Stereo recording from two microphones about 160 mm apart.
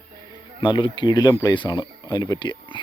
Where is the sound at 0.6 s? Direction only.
30° left (ahead or behind).